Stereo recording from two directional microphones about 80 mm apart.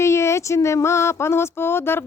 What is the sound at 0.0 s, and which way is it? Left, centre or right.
Speech, left.